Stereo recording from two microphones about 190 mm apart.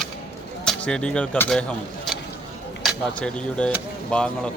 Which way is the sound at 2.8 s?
5° left (ahead or behind).